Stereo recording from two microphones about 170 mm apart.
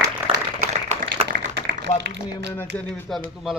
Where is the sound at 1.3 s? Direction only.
60° right (ahead or behind).